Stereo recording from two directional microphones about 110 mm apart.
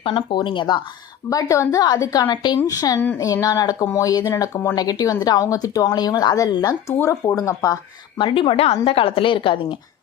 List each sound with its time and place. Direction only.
0.0 s a woman's voice: 50° left (ahead or behind)
1.3 s speech: 30° left (ahead or behind)
7.0 s speech: 25° left (ahead or behind)
7.3 s speech: 35° left (ahead or behind)
8.2 s a woman's voice: 50° left (ahead or behind)